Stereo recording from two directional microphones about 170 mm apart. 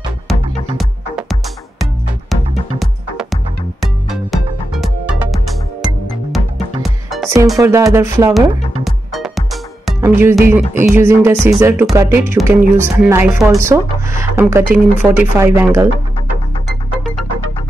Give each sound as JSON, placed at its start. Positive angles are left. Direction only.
{"t": 0.3, "sound": "music", "side_deg": 0}
{"t": 7.6, "sound": "speech", "side_deg": -15}
{"t": 8.3, "sound": "music", "side_deg": 0}
{"t": 9.9, "sound": "music", "side_deg": -15}
{"t": 10.5, "sound": "speech", "side_deg": -10}